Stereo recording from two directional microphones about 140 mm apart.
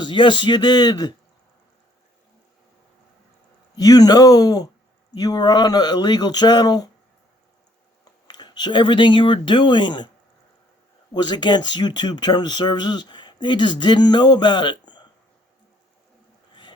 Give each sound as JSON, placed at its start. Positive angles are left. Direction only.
{"t": 0.0, "sound": "speech", "side_deg": 35}
{"t": 3.8, "sound": "speech", "side_deg": 25}
{"t": 8.3, "sound": "speech", "side_deg": 30}
{"t": 11.1, "sound": "speech", "side_deg": 30}